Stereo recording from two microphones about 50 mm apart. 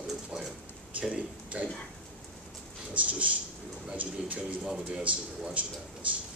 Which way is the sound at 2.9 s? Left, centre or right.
Right.